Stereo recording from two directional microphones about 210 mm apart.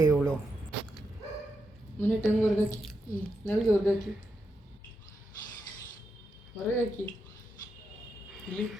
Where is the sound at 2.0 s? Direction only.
10° left (ahead or behind).